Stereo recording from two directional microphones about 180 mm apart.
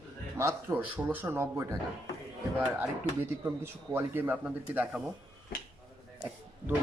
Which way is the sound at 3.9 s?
10° right (ahead or behind).